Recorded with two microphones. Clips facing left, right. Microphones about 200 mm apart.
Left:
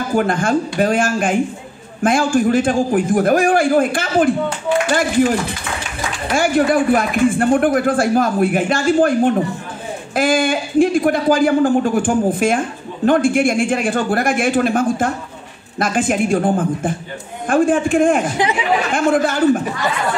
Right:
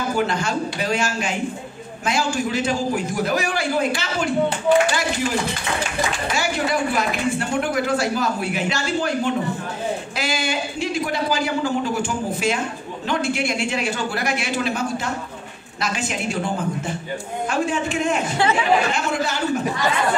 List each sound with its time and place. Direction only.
0.1 s speech: 50° left (ahead or behind)
6.3 s speech: 50° left (ahead or behind)